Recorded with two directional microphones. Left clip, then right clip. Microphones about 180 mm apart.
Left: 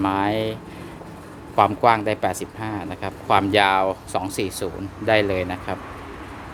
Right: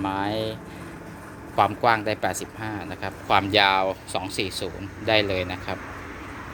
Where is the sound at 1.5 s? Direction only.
25° left (ahead or behind).